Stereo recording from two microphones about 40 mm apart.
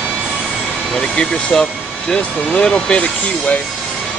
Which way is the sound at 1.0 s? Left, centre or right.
Left.